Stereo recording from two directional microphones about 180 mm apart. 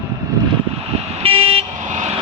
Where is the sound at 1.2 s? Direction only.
30° right (ahead or behind).